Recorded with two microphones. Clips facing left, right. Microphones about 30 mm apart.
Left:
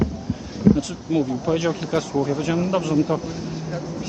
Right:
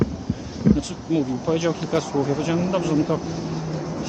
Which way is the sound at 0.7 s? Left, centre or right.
Centre.